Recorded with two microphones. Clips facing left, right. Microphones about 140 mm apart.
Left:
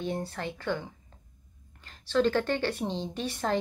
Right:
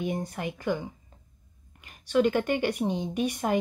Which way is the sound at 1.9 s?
15° right (ahead or behind).